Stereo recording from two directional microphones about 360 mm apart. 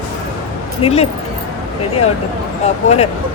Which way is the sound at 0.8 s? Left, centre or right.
Centre.